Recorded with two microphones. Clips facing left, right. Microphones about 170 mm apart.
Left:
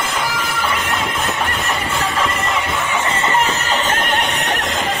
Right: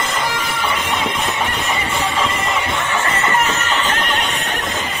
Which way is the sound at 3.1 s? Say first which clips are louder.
Left 1 dB; 30° left (ahead or behind).